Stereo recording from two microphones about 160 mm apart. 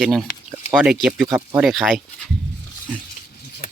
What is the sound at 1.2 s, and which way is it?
Speech, 10° right (ahead or behind).